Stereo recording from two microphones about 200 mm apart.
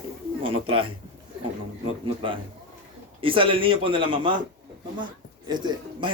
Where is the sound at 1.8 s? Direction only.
30° right (ahead or behind).